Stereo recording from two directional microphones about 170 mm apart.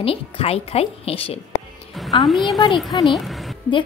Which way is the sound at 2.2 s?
Centre (ahead or behind).